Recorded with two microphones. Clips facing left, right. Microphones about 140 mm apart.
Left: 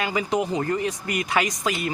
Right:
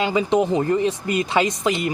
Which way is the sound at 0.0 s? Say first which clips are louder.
Right 5 dB; 20° right (ahead or behind).